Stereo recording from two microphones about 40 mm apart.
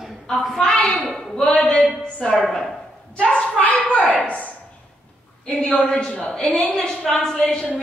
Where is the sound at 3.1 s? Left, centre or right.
Left.